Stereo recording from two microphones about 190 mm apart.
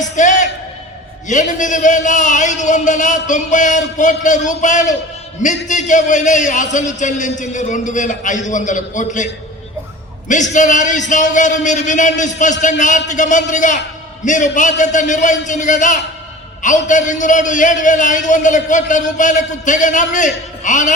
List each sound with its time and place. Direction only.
0.0 s music: 40° left (ahead or behind)
1.3 s a man's voice: 40° left (ahead or behind)